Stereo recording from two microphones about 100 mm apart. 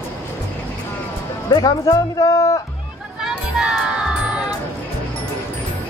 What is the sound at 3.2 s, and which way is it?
Music, 5° right (ahead or behind).